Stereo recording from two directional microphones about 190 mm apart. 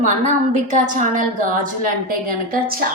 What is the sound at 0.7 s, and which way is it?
A woman's voice, 45° right (ahead or behind).